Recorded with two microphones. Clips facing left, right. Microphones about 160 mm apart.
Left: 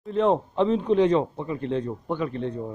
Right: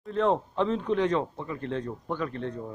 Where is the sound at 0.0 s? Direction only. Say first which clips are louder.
Left 4 dB; 15° left (ahead or behind).